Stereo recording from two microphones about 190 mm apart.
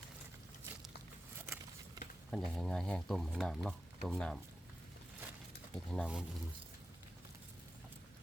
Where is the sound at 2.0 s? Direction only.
20° right (ahead or behind).